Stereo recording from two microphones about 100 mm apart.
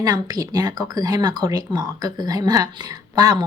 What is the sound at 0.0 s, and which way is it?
Speech, 40° right (ahead or behind).